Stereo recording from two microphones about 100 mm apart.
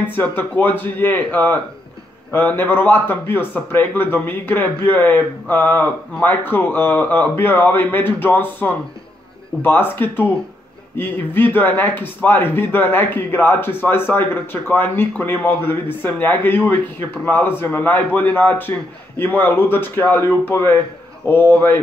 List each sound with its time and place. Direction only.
0.0 s speech: 20° left (ahead or behind)